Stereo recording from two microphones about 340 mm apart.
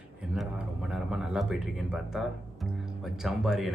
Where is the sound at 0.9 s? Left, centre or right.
Centre.